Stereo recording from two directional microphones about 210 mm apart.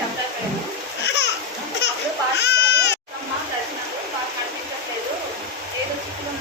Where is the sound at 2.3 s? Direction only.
55° left (ahead or behind).